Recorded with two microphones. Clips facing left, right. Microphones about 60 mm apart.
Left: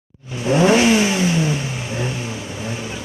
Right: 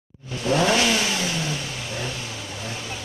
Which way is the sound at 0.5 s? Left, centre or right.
Centre.